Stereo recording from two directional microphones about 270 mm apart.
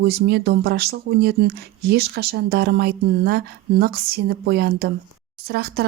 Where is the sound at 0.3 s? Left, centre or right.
Right.